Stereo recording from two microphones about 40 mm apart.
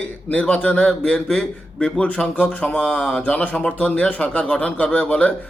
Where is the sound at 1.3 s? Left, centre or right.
Centre.